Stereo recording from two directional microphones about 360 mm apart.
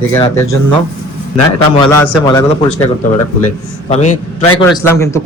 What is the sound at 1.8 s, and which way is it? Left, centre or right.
Speech, centre.